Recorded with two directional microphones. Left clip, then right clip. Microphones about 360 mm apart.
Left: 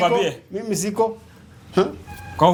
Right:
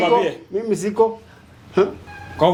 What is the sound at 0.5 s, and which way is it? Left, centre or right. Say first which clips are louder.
Speech: right 4 dB; left.